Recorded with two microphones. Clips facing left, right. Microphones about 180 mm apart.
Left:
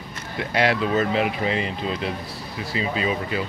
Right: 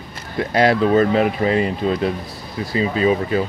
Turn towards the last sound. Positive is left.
turn(degrees=-40)  # may be behind; listen again after turning